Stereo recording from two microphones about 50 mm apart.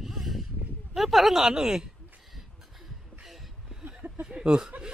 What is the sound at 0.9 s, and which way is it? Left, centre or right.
Speech, centre.